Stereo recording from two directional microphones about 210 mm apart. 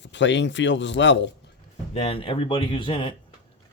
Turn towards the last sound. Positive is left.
turn(degrees=20)  # may be behind; listen again after turning